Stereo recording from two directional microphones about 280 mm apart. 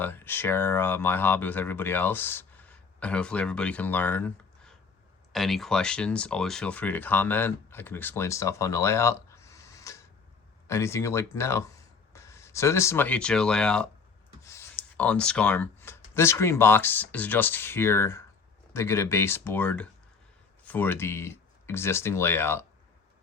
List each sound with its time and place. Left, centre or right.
0.0 s speech: centre
14.4 s a sound: centre
16.1 s speech: centre